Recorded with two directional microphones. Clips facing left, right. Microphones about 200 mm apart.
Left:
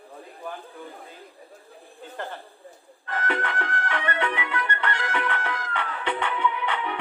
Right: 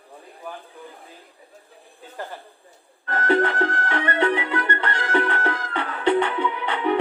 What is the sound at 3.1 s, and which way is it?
Music, 35° right (ahead or behind).